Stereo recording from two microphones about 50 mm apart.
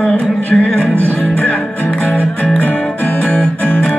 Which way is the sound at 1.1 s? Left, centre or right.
Left.